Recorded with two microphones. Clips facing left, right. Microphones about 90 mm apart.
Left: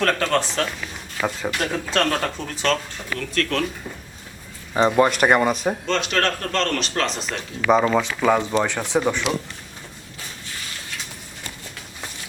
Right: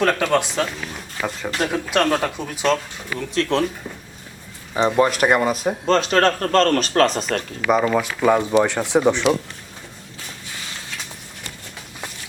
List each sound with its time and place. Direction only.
0.0 s speech: 10° right (ahead or behind)
3.2 s speech: 25° right (ahead or behind)
4.7 s speech: 5° left (ahead or behind)
5.8 s speech: 35° right (ahead or behind)
7.7 s speech: centre (ahead or behind); by 9.2 s 15° right (ahead or behind)